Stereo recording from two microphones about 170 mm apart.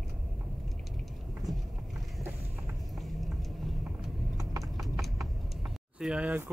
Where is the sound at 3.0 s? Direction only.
Centre (ahead or behind).